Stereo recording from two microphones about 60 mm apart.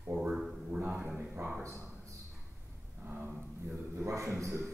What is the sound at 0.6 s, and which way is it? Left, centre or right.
Speech, right.